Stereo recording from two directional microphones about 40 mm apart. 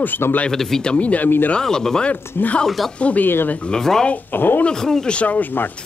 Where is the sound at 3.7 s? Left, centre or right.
Centre.